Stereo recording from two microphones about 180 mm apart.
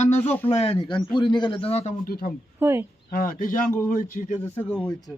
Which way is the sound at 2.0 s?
55° left (ahead or behind).